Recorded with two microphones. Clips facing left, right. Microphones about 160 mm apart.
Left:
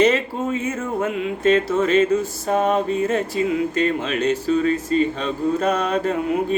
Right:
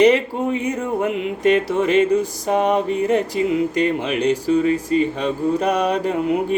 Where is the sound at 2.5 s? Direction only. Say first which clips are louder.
Right 1 dB; 15° right (ahead or behind).